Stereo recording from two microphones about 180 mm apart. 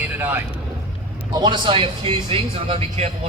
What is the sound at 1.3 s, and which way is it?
A man's voice, 25° right (ahead or behind).